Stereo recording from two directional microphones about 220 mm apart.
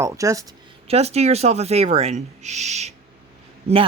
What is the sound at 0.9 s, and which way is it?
Speech, 30° right (ahead or behind).